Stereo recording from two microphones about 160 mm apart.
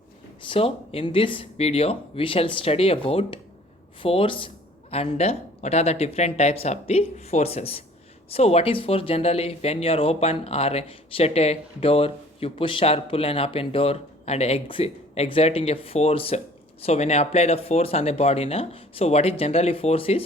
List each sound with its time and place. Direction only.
0.4 s speech: 35° left (ahead or behind)